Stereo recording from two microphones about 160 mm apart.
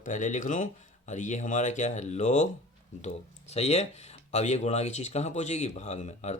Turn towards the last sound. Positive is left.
turn(degrees=45)  # may be behind; listen again after turning